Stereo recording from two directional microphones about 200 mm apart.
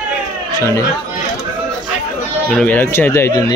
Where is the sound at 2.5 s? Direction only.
5° left (ahead or behind).